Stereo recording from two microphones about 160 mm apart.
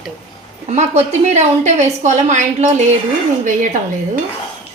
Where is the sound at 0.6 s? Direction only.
45° right (ahead or behind).